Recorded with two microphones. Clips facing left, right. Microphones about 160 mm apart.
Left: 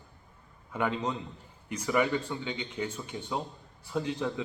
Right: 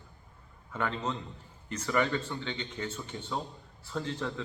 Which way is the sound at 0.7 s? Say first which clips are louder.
Left 3 dB; 15° left (ahead or behind).